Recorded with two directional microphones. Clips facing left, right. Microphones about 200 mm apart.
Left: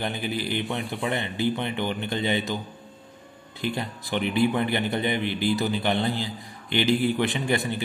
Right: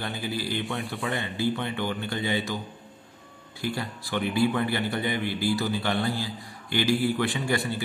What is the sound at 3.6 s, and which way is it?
A man's voice, 20° left (ahead or behind).